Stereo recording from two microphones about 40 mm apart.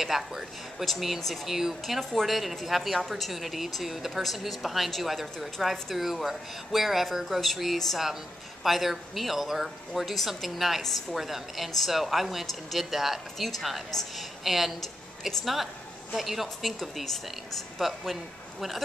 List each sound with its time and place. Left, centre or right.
0.0 s a woman's voice: centre
11.1 s a woman's voice: centre